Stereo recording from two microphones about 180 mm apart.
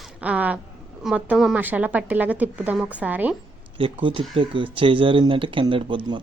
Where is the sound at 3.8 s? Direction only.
30° right (ahead or behind).